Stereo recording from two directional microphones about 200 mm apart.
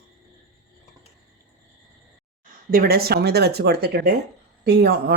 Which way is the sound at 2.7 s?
50° right (ahead or behind).